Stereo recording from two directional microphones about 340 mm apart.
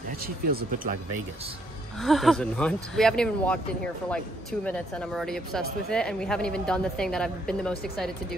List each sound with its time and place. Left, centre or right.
0.5 s speech: right
2.0 s speech: centre